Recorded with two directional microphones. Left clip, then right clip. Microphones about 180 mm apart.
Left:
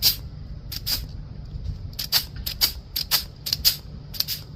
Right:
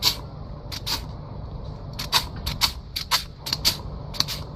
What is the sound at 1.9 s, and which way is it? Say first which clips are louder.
Mechanisms: right 1 dB; 45° left (ahead or behind).